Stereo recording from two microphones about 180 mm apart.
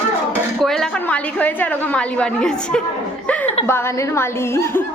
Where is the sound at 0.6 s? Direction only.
5° left (ahead or behind).